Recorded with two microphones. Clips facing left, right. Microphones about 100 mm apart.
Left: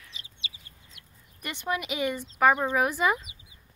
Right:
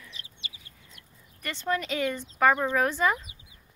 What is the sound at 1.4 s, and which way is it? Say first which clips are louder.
Speech: right 2 dB; 15° left (ahead or behind).